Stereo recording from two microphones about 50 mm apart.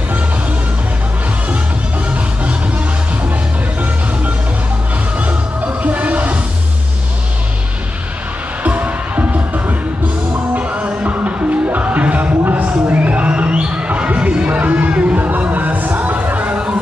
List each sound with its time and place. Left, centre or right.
5.8 s music: right
8.6 s music: right